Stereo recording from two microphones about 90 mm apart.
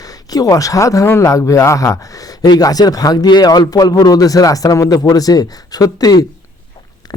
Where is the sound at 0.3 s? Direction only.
40° left (ahead or behind).